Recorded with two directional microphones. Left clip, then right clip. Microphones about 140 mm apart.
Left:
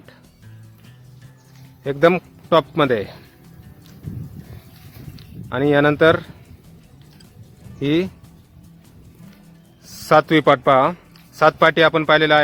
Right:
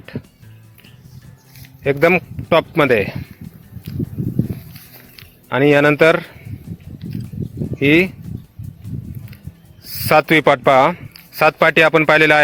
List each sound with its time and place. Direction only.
1.8 s speech: 20° right (ahead or behind)
5.1 s speech: 20° right (ahead or behind)
7.8 s speech: 20° right (ahead or behind)
9.8 s speech: 25° right (ahead or behind)